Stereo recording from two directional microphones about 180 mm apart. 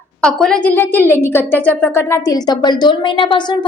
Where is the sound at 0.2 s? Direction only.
5° left (ahead or behind).